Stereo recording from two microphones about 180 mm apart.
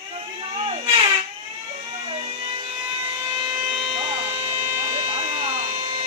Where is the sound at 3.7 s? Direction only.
30° right (ahead or behind).